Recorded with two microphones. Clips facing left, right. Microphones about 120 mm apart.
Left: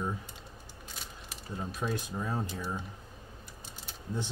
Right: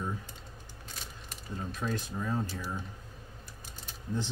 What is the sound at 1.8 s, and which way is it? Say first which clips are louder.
Speech: even; 15° left (ahead or behind).